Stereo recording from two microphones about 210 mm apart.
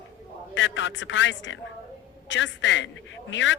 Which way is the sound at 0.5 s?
60° left (ahead or behind).